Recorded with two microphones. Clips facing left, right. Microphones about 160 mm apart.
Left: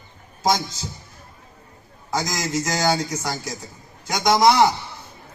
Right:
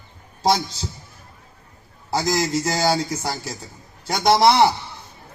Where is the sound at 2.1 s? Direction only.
30° right (ahead or behind).